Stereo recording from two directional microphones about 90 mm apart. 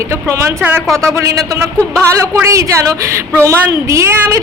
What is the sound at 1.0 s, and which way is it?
A woman's voice, 40° right (ahead or behind).